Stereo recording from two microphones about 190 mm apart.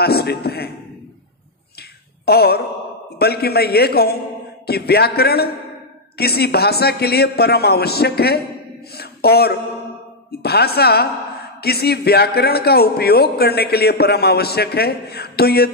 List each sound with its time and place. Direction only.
0.0 s a man's voice: 55° left (ahead or behind)
1.8 s a sound: 55° left (ahead or behind)
3.2 s a man's voice: 55° left (ahead or behind)